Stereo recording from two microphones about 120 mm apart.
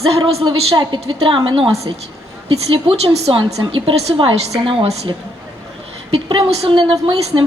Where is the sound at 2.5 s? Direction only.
55° right (ahead or behind).